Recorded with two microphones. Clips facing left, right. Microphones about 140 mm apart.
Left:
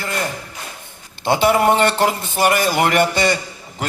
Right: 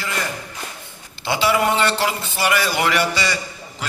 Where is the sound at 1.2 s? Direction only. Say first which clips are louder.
Left 4 dB; 50° left (ahead or behind).